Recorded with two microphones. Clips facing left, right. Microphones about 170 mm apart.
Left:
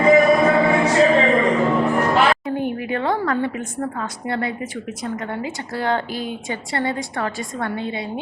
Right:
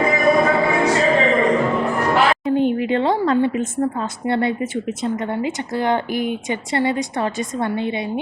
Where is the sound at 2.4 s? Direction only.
20° right (ahead or behind).